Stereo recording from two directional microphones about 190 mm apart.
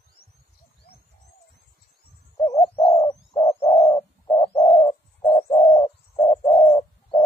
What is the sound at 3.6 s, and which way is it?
Bird, 35° left (ahead or behind).